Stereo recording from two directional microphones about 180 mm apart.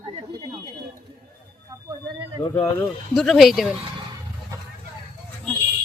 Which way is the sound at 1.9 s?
25° right (ahead or behind).